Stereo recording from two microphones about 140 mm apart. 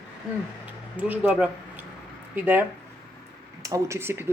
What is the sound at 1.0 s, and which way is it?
Speech, 10° right (ahead or behind).